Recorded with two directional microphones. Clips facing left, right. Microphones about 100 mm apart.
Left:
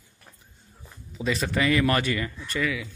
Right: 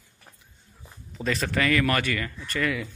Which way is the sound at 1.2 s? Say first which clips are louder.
Left 1 dB; 10° left (ahead or behind).